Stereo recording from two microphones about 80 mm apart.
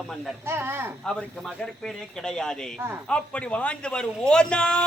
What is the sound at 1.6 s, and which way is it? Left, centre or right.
Speech, centre.